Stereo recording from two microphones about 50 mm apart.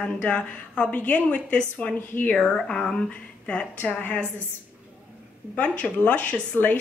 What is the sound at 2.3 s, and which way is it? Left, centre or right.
A woman's voice, centre.